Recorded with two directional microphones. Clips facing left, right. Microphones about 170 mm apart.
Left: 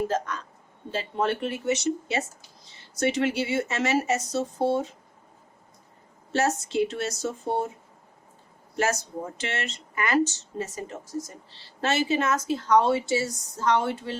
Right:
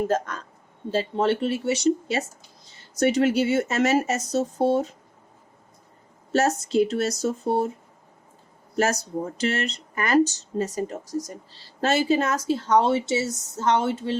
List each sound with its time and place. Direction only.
0.1 s speech: 45° right (ahead or behind)
0.9 s a woman's voice: 30° right (ahead or behind)
6.3 s speech: 40° right (ahead or behind)
8.8 s a woman's voice: 40° right (ahead or behind)